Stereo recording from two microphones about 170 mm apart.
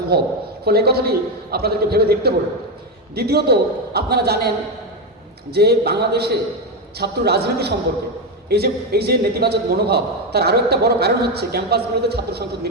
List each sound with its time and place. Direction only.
0.1 s a man's voice: 65° right (ahead or behind)